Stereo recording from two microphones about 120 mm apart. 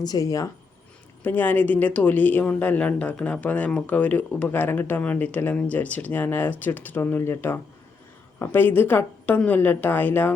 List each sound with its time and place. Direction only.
0.0 s speech: 30° left (ahead or behind)
1.2 s speech: 15° left (ahead or behind)